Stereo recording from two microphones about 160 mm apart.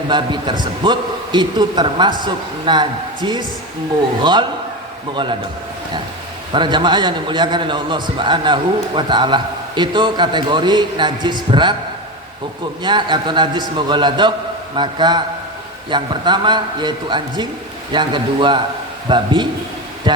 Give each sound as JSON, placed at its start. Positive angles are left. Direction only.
{"t": 0.1, "sound": "a man's voice", "side_deg": -30}
{"t": 6.5, "sound": "a man's voice", "side_deg": -30}
{"t": 12.8, "sound": "a man's voice", "side_deg": -30}